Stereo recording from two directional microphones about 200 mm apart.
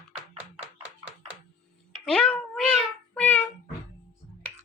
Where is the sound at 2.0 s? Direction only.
5° left (ahead or behind).